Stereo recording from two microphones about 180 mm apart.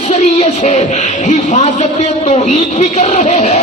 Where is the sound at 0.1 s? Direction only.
40° left (ahead or behind).